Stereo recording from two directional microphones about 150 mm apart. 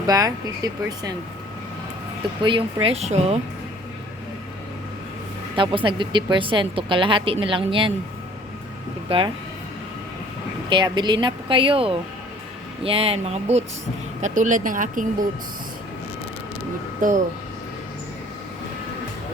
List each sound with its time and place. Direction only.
0.0 s speech: 25° right (ahead or behind)
2.4 s speech: 30° right (ahead or behind)
5.5 s speech: 35° right (ahead or behind)
9.0 s speech: 35° right (ahead or behind)
10.7 s speech: 30° right (ahead or behind); by 13.7 s 45° right (ahead or behind)
14.2 s speech: 55° right (ahead or behind)
17.0 s speech: 60° right (ahead or behind)